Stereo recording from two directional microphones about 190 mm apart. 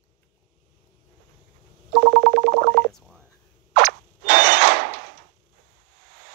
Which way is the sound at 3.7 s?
50° right (ahead or behind).